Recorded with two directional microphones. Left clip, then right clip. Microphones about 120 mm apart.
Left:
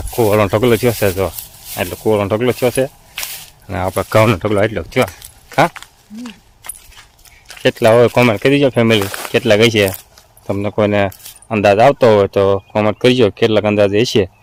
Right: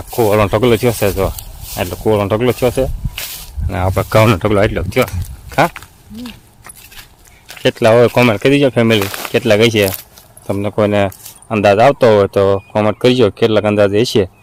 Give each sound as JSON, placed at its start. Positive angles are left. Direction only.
{"t": 0.1, "sound": "speech", "side_deg": -10}
{"t": 4.3, "sound": "speech", "side_deg": -25}
{"t": 5.5, "sound": "a sound", "side_deg": 0}
{"t": 7.6, "sound": "speech", "side_deg": 0}
{"t": 9.0, "sound": "speech", "side_deg": -35}
{"t": 9.3, "sound": "speech", "side_deg": 0}